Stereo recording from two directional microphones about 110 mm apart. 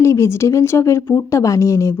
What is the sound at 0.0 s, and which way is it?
Speech, 25° left (ahead or behind).